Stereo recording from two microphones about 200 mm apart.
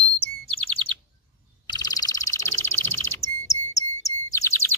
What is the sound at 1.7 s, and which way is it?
Frog, 20° left (ahead or behind).